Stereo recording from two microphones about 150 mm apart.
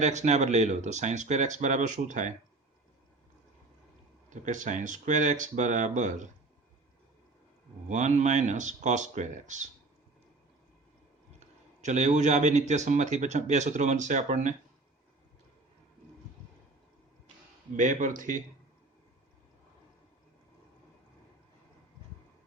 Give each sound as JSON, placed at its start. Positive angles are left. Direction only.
{"t": 0.0, "sound": "speech", "side_deg": -50}
{"t": 4.3, "sound": "speech", "side_deg": -55}
{"t": 7.9, "sound": "speech", "side_deg": -50}
{"t": 11.3, "sound": "speech", "side_deg": -50}
{"t": 17.7, "sound": "speech", "side_deg": -60}